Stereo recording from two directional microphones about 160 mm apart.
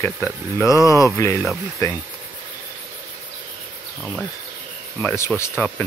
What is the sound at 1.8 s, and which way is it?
Insect, 20° left (ahead or behind).